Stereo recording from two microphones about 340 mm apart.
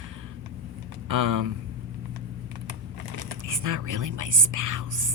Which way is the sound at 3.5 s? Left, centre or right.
Right.